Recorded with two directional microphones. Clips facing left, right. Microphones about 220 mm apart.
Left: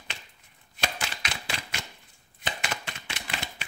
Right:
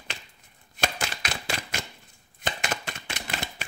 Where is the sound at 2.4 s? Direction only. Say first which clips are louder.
Right 3 dB; 45° right (ahead or behind).